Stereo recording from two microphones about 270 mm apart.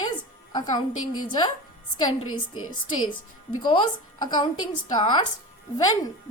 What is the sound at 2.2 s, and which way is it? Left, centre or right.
Speech, left.